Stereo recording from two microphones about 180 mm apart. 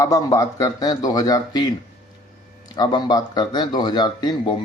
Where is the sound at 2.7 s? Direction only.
20° left (ahead or behind).